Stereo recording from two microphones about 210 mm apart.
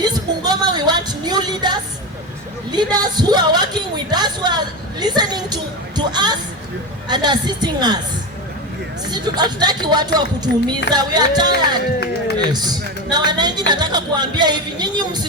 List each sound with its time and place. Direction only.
0.0 s a sound: 20° right (ahead or behind)
2.7 s speech: 20° right (ahead or behind)
6.0 s music: 20° right (ahead or behind)
7.1 s a man's voice: 20° right (ahead or behind)
9.0 s a man's voice: 20° right (ahead or behind)